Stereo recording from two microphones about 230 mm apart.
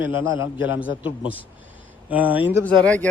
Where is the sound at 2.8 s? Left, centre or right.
Centre.